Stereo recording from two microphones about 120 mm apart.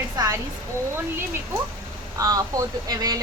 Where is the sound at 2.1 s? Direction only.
30° right (ahead or behind).